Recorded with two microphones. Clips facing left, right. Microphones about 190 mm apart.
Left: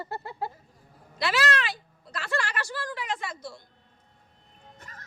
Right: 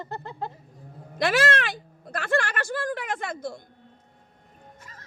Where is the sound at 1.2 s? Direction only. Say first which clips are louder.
Right 4 dB; 50° right (ahead or behind).